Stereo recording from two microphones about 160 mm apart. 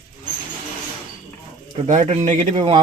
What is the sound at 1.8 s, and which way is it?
Speech, 45° right (ahead or behind).